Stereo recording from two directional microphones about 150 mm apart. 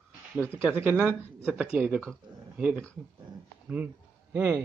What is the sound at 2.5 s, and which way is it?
Speech, 5° right (ahead or behind).